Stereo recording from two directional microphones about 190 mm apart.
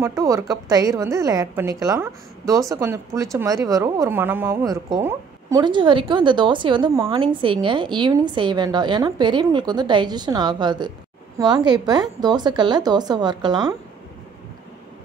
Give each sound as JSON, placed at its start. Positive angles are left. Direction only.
{"t": 0.0, "sound": "a woman's voice", "side_deg": -15}